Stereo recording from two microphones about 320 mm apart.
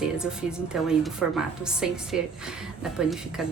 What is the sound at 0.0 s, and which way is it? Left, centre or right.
Speech, centre.